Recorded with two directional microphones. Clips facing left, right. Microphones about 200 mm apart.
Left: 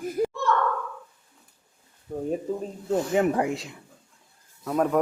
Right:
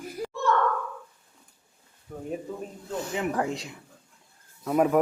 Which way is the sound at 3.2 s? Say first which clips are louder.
Left 7 dB; 50° left (ahead or behind).